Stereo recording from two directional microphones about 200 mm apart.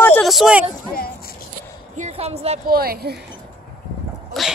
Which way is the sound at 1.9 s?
35° right (ahead or behind).